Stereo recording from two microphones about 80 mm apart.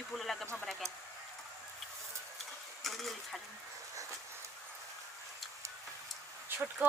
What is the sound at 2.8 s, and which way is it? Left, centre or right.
Speech, centre.